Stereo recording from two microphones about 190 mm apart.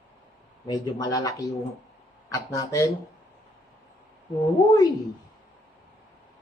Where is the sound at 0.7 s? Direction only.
20° left (ahead or behind).